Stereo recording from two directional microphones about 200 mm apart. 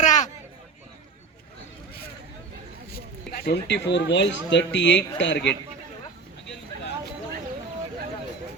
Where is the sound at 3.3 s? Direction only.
50° left (ahead or behind).